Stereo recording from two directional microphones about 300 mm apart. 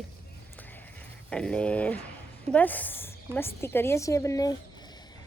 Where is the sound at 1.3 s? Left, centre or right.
Centre.